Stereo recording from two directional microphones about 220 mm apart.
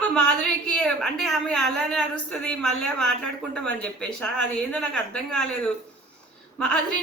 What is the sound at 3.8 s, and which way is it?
A woman's voice, 5° left (ahead or behind).